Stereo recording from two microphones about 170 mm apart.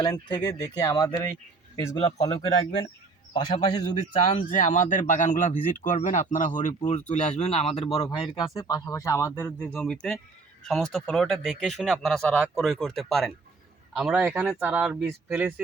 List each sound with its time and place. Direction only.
0.3 s speech: 20° left (ahead or behind)
2.0 s speech: 35° left (ahead or behind)
3.3 s speech: 25° left (ahead or behind)
3.9 s speech: 40° left (ahead or behind)
4.4 s speech: 50° left (ahead or behind); by 15.6 s 10° right (ahead or behind)